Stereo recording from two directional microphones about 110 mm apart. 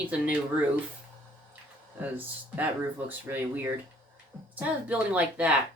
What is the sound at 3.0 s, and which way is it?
Speech, 15° right (ahead or behind).